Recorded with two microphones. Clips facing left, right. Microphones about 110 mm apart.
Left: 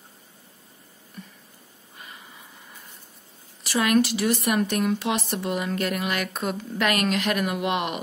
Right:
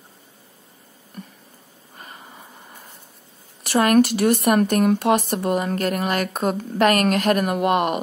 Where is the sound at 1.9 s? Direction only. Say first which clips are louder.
Right 4 dB; 45° right (ahead or behind).